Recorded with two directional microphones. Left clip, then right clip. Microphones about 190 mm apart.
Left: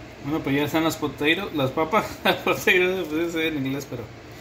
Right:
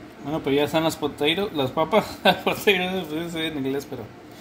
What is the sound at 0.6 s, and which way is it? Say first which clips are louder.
Speech: right 1 dB; 50° right (ahead or behind).